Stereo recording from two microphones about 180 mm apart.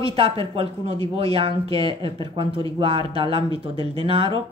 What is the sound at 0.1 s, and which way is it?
Speech, 30° right (ahead or behind).